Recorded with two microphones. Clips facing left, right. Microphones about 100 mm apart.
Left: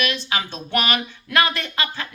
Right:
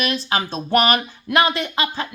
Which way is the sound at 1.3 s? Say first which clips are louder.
Right 3 dB; 25° right (ahead or behind).